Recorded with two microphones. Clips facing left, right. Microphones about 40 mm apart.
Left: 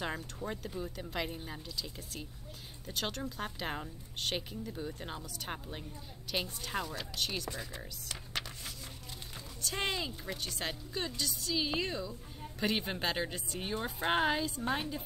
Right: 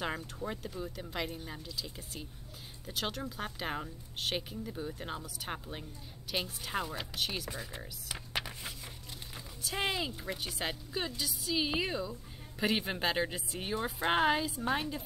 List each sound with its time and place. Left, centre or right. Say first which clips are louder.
0.0 s a woman's voice: right 1 dB; centre